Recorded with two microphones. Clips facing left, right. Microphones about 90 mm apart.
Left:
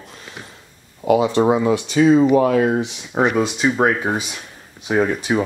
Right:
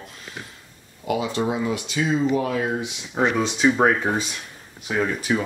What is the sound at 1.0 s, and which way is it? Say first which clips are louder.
Speech: left 9 dB; 35° left (ahead or behind).